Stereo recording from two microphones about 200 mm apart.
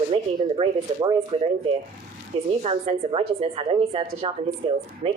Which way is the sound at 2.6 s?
30° right (ahead or behind).